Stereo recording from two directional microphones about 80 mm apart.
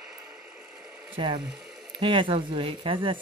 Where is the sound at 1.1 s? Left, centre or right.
Right.